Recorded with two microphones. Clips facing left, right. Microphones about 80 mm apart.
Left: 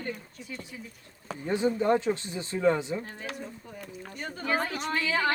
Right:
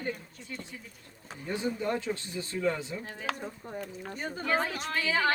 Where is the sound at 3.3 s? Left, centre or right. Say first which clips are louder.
Right 2 dB; right.